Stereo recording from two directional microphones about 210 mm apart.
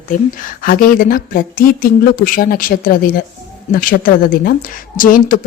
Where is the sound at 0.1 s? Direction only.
40° left (ahead or behind).